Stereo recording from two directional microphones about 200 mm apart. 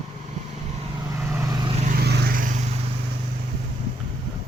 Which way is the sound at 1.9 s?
50° right (ahead or behind).